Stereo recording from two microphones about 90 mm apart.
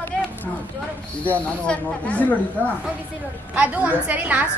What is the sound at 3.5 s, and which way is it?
Speech, 15° right (ahead or behind).